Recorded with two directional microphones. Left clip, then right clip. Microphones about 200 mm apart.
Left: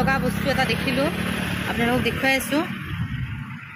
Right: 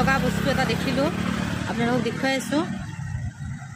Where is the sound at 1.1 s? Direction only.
50° right (ahead or behind).